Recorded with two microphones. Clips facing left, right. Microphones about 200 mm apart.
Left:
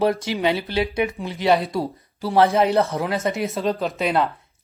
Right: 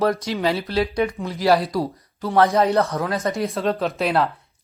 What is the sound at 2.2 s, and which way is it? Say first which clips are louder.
Speech: even; 30° left (ahead or behind).